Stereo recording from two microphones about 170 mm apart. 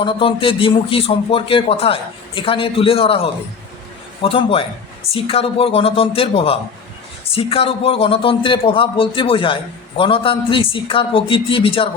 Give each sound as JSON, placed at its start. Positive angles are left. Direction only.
{"t": 0.0, "sound": "a man's voice", "side_deg": 30}